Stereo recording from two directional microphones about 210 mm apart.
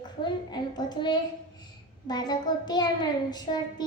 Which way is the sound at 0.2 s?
20° left (ahead or behind).